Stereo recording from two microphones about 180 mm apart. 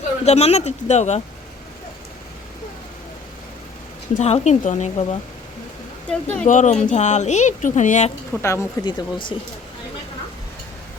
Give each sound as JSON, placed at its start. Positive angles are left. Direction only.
{"t": 0.3, "sound": "speech", "side_deg": 35}
{"t": 4.1, "sound": "speech", "side_deg": 40}
{"t": 6.1, "sound": "speech", "side_deg": 10}
{"t": 6.4, "sound": "speech", "side_deg": 40}
{"t": 8.3, "sound": "speech", "side_deg": 15}